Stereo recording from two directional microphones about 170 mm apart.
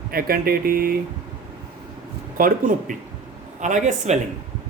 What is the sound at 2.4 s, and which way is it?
Speech, 55° right (ahead or behind).